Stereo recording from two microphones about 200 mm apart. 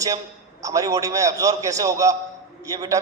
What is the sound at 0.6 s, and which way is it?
A man's voice, 15° right (ahead or behind).